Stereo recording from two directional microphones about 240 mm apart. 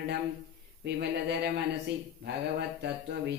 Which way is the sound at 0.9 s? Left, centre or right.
Right.